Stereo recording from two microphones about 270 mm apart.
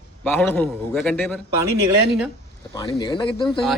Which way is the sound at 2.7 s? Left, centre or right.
Centre.